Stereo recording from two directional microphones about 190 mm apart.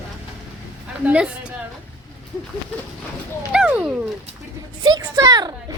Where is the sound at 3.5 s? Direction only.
5° right (ahead or behind).